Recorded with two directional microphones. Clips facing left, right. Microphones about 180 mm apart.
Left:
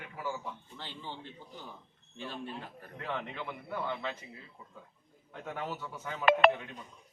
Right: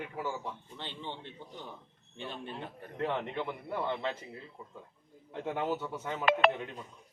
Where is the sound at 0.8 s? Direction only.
20° right (ahead or behind).